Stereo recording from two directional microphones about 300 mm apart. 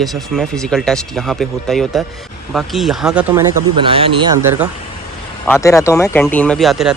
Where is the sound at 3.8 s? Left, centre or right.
Centre.